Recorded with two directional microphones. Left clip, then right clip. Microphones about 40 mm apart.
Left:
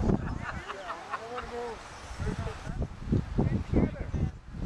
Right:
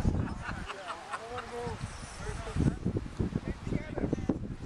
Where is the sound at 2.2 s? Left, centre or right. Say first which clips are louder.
Left 4 dB; centre.